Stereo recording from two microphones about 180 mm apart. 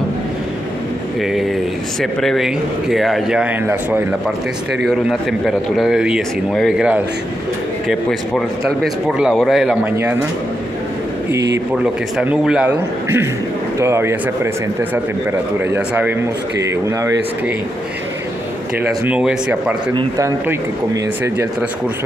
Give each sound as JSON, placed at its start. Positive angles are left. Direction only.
{"t": 1.2, "sound": "speech", "side_deg": 0}
{"t": 5.4, "sound": "speech", "side_deg": 0}
{"t": 9.9, "sound": "a man's voice", "side_deg": -10}
{"t": 11.3, "sound": "speech", "side_deg": -75}
{"t": 11.8, "sound": "a man's voice", "side_deg": -5}
{"t": 19.0, "sound": "a man's voice", "side_deg": -5}